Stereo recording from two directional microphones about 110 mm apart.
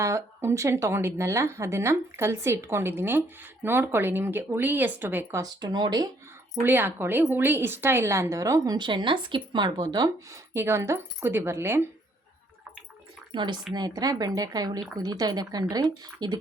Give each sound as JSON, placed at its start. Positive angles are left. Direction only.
{"t": 0.0, "sound": "speech", "side_deg": -25}
{"t": 5.4, "sound": "speech", "side_deg": -40}
{"t": 6.6, "sound": "speech", "side_deg": -20}
{"t": 13.3, "sound": "a woman's voice", "side_deg": -45}